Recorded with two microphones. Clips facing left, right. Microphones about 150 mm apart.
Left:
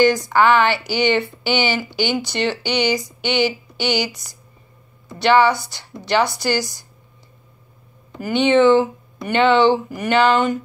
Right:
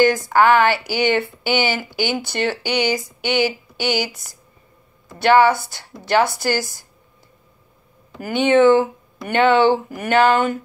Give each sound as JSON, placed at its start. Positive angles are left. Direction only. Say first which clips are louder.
{"t": 0.3, "sound": "a woman's voice", "louder": "right 1 dB", "side_deg": -45}
{"t": 8.2, "sound": "a woman's voice", "louder": "even", "side_deg": -50}